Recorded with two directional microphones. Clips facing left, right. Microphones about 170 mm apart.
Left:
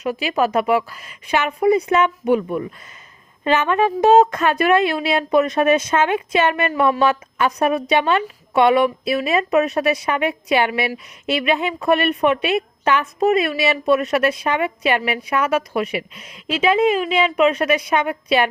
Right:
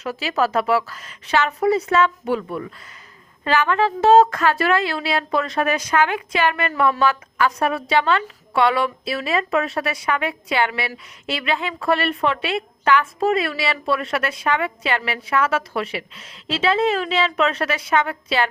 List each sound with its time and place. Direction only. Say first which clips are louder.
0.0 s a woman's voice: left 2 dB; 15° left (ahead or behind)